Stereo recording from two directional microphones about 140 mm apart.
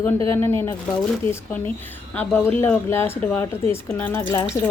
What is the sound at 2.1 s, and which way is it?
Speech, 10° left (ahead or behind).